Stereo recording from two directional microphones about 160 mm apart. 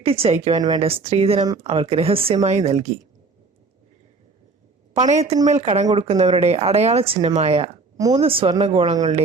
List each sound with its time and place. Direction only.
0.0 s speech: 35° right (ahead or behind)
4.9 s speech: 45° right (ahead or behind)
7.9 s speech: 20° right (ahead or behind)
8.2 s speech: 35° right (ahead or behind)